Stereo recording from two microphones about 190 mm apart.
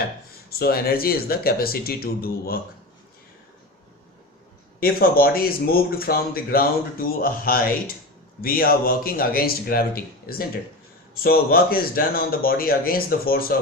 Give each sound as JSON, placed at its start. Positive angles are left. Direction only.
{"t": 0.5, "sound": "speech", "side_deg": 55}
{"t": 4.8, "sound": "speech", "side_deg": 50}